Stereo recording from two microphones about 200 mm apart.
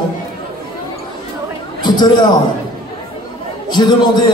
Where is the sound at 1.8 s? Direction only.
20° left (ahead or behind).